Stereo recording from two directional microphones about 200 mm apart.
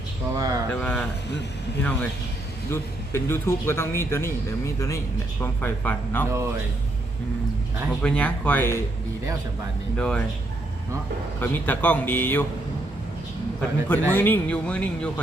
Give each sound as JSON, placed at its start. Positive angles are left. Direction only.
{"t": 0.3, "sound": "speech", "side_deg": -15}
{"t": 0.8, "sound": "speech", "side_deg": 5}
{"t": 8.0, "sound": "speech", "side_deg": 5}
{"t": 10.0, "sound": "speech", "side_deg": 5}
{"t": 11.3, "sound": "speech", "side_deg": 10}
{"t": 13.6, "sound": "speech", "side_deg": 10}